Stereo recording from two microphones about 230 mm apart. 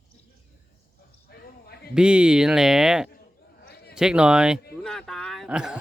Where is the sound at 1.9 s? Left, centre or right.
Centre.